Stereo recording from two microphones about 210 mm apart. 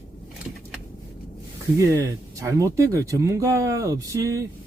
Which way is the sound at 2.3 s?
15° right (ahead or behind).